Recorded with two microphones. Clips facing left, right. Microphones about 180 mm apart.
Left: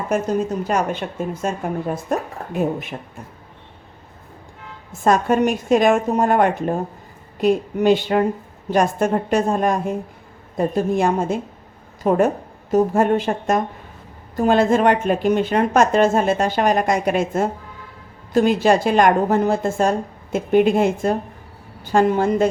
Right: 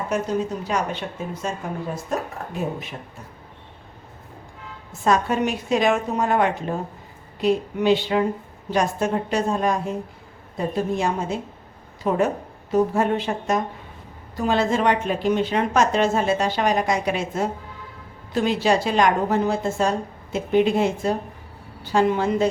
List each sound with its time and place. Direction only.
0.1 s speech: 50° left (ahead or behind)
4.9 s speech: 50° left (ahead or behind)